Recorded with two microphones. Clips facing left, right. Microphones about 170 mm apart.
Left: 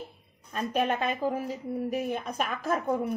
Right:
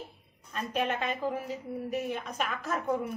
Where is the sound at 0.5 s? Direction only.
45° left (ahead or behind).